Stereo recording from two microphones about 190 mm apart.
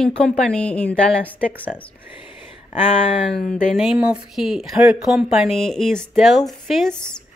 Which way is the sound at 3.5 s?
Centre (ahead or behind).